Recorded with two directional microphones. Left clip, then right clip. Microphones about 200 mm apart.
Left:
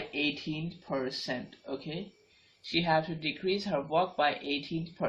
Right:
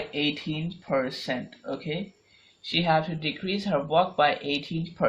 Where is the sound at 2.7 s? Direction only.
35° right (ahead or behind).